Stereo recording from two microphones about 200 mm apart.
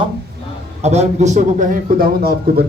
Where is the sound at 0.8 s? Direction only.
35° right (ahead or behind); by 2.7 s 50° right (ahead or behind).